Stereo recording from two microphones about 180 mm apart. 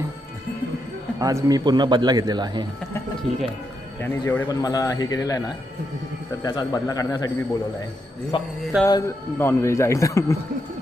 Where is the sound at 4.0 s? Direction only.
10° left (ahead or behind).